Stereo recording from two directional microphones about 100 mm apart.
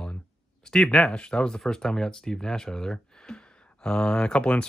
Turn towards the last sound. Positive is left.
turn(degrees=10)  # may be behind; listen again after turning